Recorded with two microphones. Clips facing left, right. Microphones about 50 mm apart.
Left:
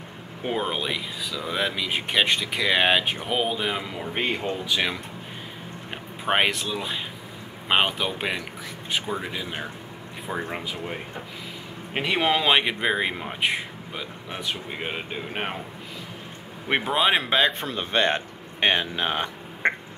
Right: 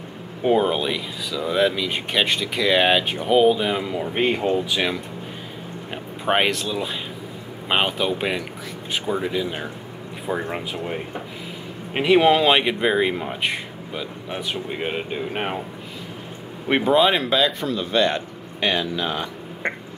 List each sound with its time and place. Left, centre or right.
0.4 s speech: centre
6.2 s speech: centre
11.9 s speech: centre
14.3 s speech: centre
16.6 s speech: centre
17.1 s a man's voice: left